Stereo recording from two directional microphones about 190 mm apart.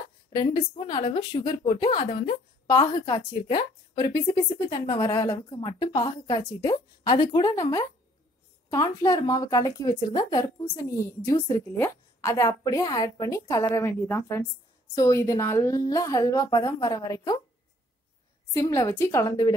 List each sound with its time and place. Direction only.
0.3 s a woman's voice: 20° left (ahead or behind)
18.5 s speech: 15° left (ahead or behind)